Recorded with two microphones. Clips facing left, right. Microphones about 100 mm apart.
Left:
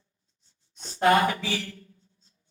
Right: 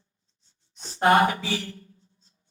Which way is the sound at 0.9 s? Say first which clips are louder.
Right 2 dB; 30° right (ahead or behind).